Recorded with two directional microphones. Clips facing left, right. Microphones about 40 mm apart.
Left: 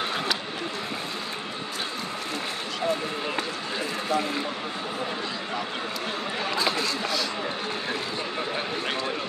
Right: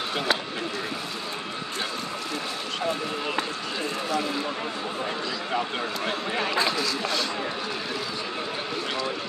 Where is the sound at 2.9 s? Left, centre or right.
Right.